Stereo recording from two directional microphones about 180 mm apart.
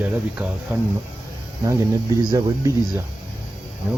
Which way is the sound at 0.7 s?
10° right (ahead or behind).